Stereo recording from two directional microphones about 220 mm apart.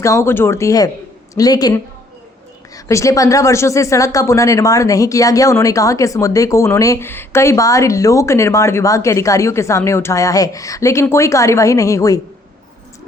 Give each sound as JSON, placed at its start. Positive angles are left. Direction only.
{"t": 0.0, "sound": "speech", "side_deg": 15}